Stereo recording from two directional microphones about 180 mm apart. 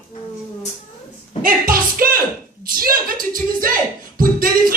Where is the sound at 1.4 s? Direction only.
50° right (ahead or behind).